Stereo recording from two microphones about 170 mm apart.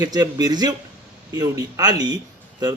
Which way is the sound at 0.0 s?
20° right (ahead or behind).